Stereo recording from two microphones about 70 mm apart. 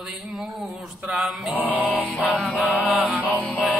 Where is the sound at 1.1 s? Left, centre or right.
Centre.